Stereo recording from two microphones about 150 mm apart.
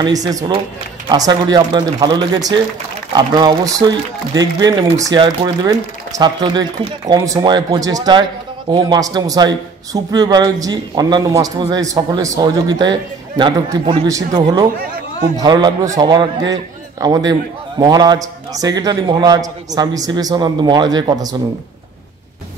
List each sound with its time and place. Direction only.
0.0 s speech: 25° right (ahead or behind)